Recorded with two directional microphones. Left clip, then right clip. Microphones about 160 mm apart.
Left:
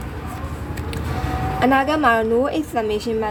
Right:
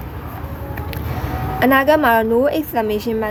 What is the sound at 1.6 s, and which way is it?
A woman's voice, 20° right (ahead or behind).